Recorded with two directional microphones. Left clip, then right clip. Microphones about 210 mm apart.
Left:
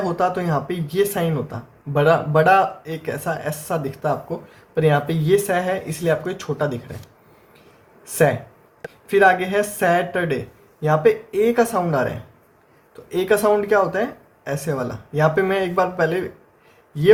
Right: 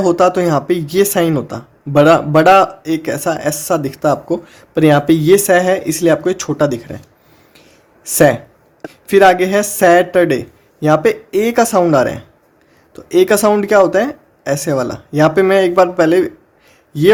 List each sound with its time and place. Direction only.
0.0 s speech: 55° right (ahead or behind)
8.0 s speech: 55° right (ahead or behind)